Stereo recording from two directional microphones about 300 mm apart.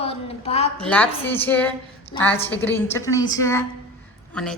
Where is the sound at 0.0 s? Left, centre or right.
Centre.